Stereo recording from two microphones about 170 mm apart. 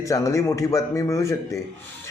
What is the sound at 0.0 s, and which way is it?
Speech, 20° left (ahead or behind).